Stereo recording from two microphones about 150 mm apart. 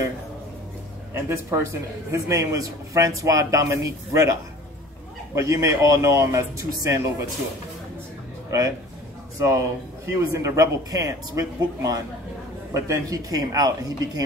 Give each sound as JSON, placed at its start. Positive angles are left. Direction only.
{"t": 1.1, "sound": "a man's voice", "side_deg": -20}
{"t": 8.5, "sound": "speech", "side_deg": -25}
{"t": 10.0, "sound": "a man's voice", "side_deg": -20}